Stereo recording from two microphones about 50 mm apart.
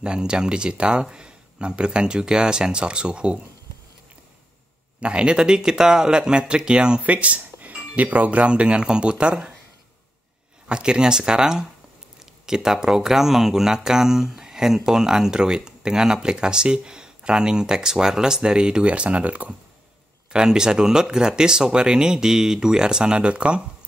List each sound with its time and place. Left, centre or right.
0.0 s speech: centre
5.0 s speech: centre
7.1 s speech: right
10.7 s speech: centre
20.3 s speech: centre